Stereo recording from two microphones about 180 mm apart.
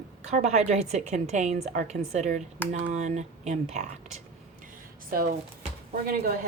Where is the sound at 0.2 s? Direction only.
40° right (ahead or behind).